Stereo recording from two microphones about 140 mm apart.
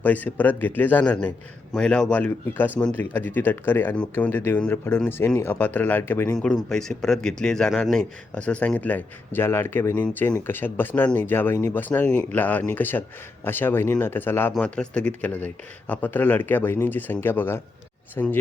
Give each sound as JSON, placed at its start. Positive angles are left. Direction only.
{"t": 0.0, "sound": "speech", "side_deg": 10}
{"t": 6.4, "sound": "speech", "side_deg": 5}